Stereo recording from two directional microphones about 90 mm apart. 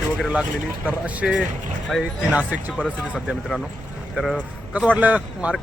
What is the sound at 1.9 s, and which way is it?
Speech, centre (ahead or behind).